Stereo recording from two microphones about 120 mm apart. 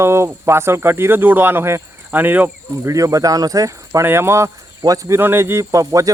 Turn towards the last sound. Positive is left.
turn(degrees=-25)  # may be behind; listen again after turning